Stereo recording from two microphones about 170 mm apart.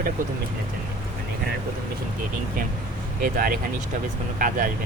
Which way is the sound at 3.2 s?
60° right (ahead or behind).